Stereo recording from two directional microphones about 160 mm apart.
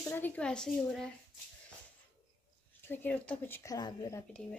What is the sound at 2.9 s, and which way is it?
Speech, 10° left (ahead or behind).